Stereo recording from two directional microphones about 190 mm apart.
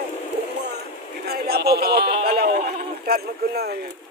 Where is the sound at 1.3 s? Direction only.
55° right (ahead or behind).